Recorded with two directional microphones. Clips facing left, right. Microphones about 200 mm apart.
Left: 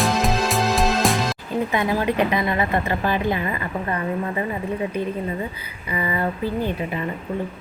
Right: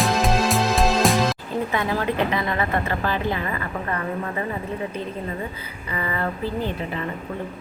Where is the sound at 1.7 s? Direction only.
15° left (ahead or behind).